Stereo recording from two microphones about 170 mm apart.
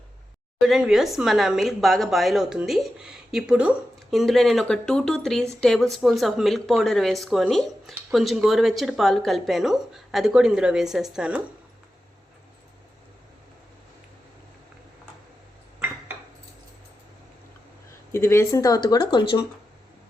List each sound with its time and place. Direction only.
0.6 s speech: centre (ahead or behind)
18.1 s speech: 15° left (ahead or behind)